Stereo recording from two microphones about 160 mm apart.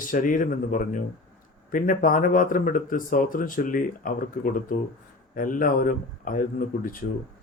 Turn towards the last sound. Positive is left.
turn(degrees=60)  # may be behind; listen again after turning